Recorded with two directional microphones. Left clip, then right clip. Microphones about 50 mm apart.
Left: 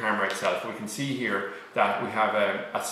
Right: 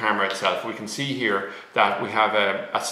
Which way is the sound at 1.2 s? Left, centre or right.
Centre.